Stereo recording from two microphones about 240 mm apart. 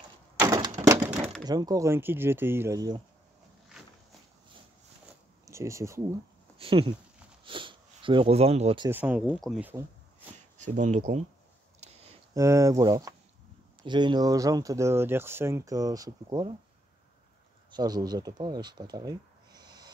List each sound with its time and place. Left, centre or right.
0.4 s a sound: centre
1.4 s speech: centre
3.6 s a sound: centre
5.4 s speech: centre
6.6 s speech: right
8.9 s speech: centre
10.3 s speech: right
12.4 s speech: centre
17.6 s speech: centre